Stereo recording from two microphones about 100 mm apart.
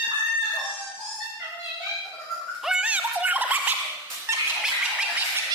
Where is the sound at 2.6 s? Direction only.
10° right (ahead or behind).